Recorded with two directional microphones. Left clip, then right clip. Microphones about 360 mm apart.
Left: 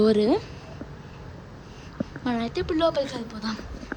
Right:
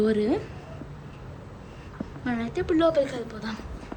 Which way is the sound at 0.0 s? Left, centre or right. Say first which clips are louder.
Left 4 dB; centre.